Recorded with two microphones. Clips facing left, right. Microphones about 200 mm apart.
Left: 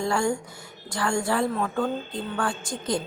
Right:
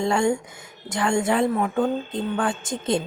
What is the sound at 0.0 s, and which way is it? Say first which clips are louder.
A woman's voice: right 4 dB; 20° right (ahead or behind).